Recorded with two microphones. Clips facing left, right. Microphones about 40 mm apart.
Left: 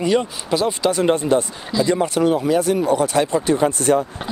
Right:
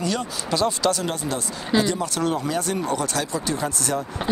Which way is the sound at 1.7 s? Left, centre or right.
Right.